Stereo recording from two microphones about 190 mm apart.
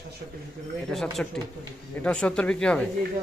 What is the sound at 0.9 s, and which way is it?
A man's voice, centre (ahead or behind).